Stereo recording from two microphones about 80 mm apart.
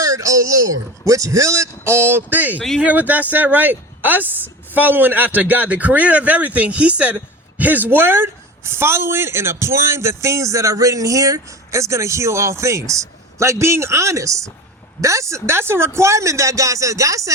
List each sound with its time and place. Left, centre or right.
0.0 s a man's voice: right